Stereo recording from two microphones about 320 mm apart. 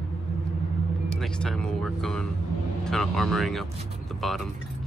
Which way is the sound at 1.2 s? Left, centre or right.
Centre.